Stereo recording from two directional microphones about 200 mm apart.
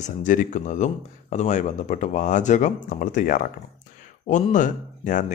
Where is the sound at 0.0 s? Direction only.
40° left (ahead or behind).